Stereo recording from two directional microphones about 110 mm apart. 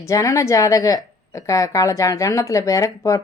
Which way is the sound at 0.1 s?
30° left (ahead or behind).